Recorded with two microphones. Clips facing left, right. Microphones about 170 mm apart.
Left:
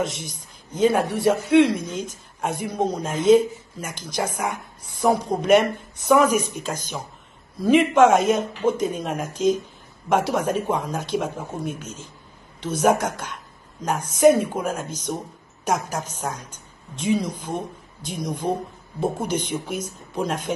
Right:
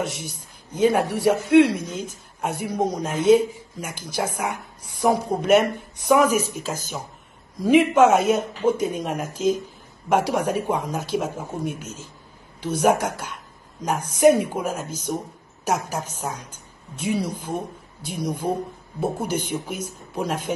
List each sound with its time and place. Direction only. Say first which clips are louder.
0.0 s a woman's voice: left 1 dB; 10° right (ahead or behind)